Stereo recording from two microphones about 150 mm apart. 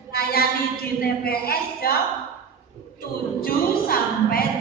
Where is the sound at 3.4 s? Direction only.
80° left.